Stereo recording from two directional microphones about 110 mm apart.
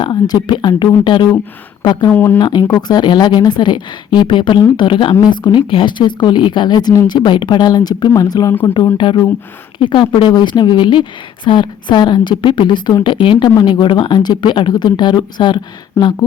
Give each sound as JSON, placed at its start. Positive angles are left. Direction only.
{"t": 0.0, "sound": "speech", "side_deg": 45}
{"t": 2.0, "sound": "speech", "side_deg": 20}
{"t": 2.6, "sound": "speech", "side_deg": 40}